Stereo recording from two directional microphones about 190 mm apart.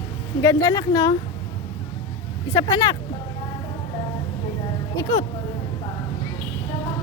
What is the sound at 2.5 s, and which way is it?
Speech, 20° left (ahead or behind).